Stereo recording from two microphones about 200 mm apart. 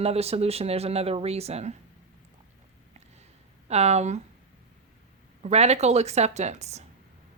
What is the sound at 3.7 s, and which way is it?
Speech, 35° right (ahead or behind).